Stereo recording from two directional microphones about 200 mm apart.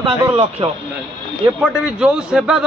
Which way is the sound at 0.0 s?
25° right (ahead or behind).